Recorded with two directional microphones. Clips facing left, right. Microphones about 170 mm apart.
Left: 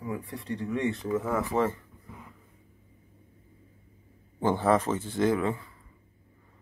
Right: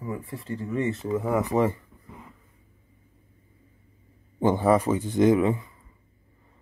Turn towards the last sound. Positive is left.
turn(degrees=-20)  # may be behind; listen again after turning